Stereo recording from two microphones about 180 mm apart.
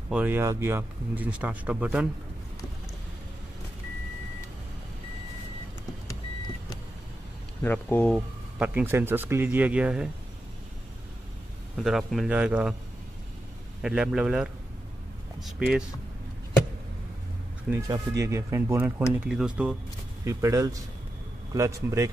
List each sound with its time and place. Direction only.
0.1 s speech: 10° right (ahead or behind)
7.6 s speech: 10° left (ahead or behind)
8.5 s speech: 10° right (ahead or behind)
11.7 s a man's voice: centre (ahead or behind)
13.8 s a man's voice: 5° right (ahead or behind)
17.6 s a man's voice: 15° right (ahead or behind)
20.2 s speech: 15° right (ahead or behind)